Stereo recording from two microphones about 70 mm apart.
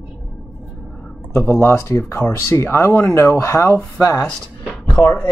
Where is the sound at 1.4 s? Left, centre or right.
Left.